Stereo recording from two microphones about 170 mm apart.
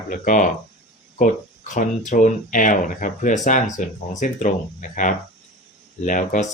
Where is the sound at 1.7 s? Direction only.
50° left (ahead or behind).